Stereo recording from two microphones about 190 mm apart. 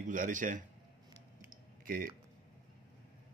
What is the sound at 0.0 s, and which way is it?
Speech, 45° right (ahead or behind).